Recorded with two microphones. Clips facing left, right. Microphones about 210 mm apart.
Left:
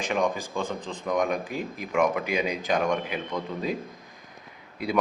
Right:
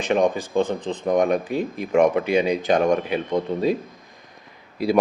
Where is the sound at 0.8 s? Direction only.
80° right.